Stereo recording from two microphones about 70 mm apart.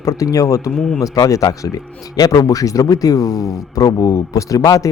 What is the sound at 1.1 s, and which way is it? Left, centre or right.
Speech, left.